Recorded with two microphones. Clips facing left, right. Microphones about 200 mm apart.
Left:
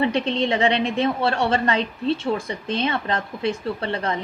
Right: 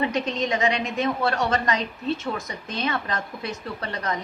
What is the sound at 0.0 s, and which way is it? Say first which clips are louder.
A woman's voice: left 4 dB; 30° left (ahead or behind).